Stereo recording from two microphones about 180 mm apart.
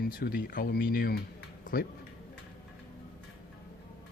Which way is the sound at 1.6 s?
55° left (ahead or behind).